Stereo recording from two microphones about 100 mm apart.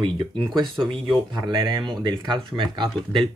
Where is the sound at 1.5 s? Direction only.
50° right (ahead or behind).